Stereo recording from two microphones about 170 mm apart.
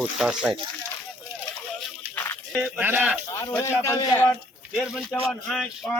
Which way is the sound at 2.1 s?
10° left (ahead or behind).